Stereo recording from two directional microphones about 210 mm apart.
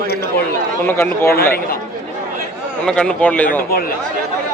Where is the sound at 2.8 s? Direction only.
5° left (ahead or behind).